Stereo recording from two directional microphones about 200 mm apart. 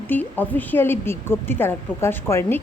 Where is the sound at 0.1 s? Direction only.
10° left (ahead or behind).